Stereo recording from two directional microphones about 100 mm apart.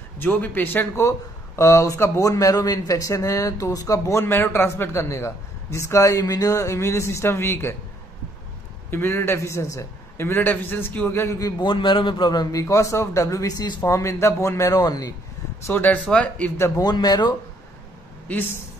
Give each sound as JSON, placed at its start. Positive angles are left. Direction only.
{"t": 0.2, "sound": "speech", "side_deg": 20}
{"t": 8.9, "sound": "speech", "side_deg": 25}
{"t": 11.6, "sound": "a man's voice", "side_deg": 55}
{"t": 12.6, "sound": "speech", "side_deg": 30}
{"t": 15.6, "sound": "speech", "side_deg": 20}
{"t": 16.5, "sound": "speech", "side_deg": 25}
{"t": 16.8, "sound": "a man's voice", "side_deg": 45}
{"t": 18.3, "sound": "speech", "side_deg": 20}